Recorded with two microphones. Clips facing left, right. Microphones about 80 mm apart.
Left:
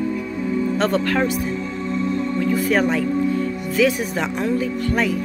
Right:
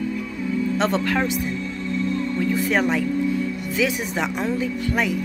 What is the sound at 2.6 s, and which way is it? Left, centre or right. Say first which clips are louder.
Speech: left 2 dB; centre.